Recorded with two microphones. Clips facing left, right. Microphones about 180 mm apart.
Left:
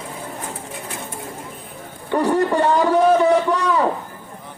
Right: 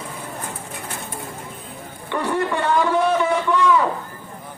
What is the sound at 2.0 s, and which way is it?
A man's voice, 40° left (ahead or behind).